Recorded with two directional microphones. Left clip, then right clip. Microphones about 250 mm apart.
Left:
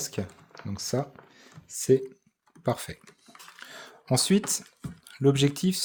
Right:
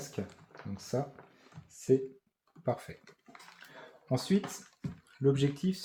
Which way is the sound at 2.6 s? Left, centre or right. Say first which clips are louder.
Left 5 dB; left.